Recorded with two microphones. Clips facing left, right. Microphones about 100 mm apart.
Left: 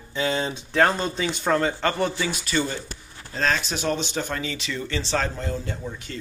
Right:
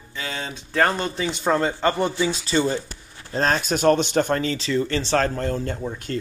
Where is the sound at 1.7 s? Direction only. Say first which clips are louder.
Right 2 dB; 15° right (ahead or behind).